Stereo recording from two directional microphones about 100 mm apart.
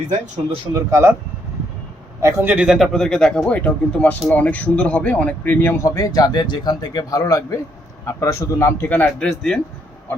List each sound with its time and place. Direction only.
0.7 s speech: 30° right (ahead or behind)
2.2 s a man's voice: 15° right (ahead or behind)
2.6 s speech: centre (ahead or behind); by 5.8 s 15° left (ahead or behind)
5.8 s a man's voice: 35° left (ahead or behind); by 9.6 s 5° left (ahead or behind)